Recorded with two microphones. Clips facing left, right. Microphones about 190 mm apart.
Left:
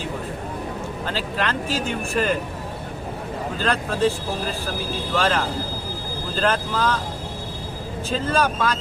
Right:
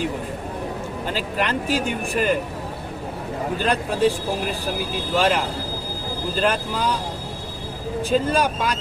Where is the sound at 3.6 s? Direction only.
15° right (ahead or behind).